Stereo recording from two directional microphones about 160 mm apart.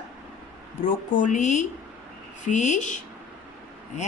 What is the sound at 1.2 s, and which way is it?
A woman's voice, 50° left (ahead or behind).